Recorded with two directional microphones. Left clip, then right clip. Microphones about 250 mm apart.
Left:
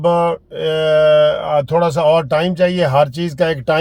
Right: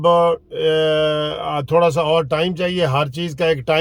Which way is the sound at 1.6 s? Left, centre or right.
Right.